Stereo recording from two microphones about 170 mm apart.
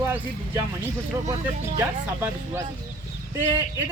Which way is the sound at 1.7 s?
15° right (ahead or behind).